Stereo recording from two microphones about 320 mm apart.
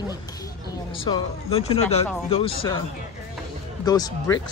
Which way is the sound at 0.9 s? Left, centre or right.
Centre.